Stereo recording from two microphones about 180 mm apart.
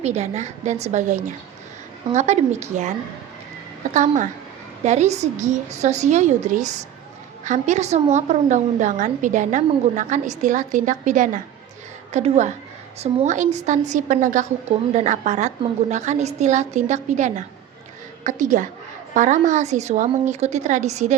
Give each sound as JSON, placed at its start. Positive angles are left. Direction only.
{"t": 0.0, "sound": "a woman's voice", "side_deg": -40}
{"t": 3.9, "sound": "a woman's voice", "side_deg": -40}